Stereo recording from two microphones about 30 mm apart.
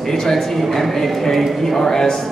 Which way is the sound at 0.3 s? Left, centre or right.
Centre.